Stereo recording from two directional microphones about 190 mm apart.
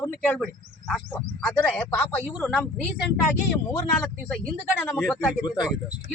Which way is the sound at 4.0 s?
5° left (ahead or behind).